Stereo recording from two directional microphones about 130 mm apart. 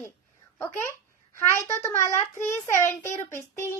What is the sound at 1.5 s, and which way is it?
A child's voice, 20° left (ahead or behind).